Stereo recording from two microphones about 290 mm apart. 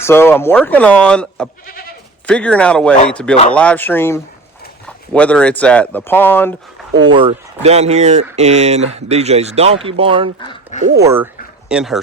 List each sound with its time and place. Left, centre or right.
0.0 s speech: centre
7.0 s speech: centre
10.4 s speech: centre
11.0 s speech: centre